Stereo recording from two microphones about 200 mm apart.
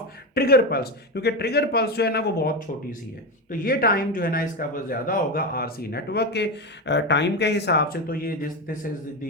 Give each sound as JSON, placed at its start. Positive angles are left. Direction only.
{"t": 0.3, "sound": "speech", "side_deg": 50}